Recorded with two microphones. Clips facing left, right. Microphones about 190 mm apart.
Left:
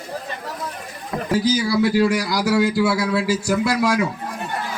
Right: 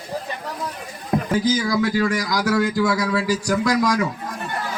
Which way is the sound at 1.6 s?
10° left (ahead or behind).